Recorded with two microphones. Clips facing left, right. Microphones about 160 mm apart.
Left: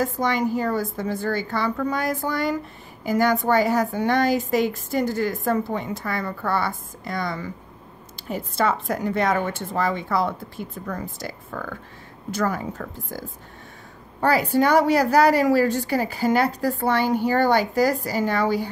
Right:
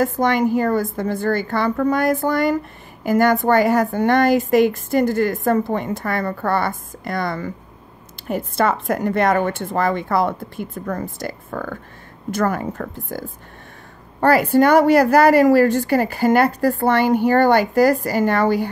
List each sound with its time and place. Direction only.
0.0 s a woman's voice: 60° right (ahead or behind)
14.2 s a woman's voice: 60° right (ahead or behind)